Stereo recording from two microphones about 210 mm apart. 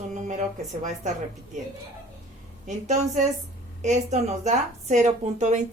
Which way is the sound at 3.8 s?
35° right (ahead or behind).